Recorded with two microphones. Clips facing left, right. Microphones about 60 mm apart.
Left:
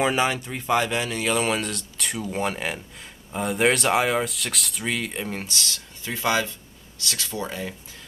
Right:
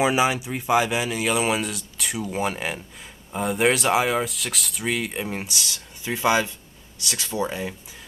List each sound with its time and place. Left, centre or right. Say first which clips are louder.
0.0 s speech: right 2 dB; centre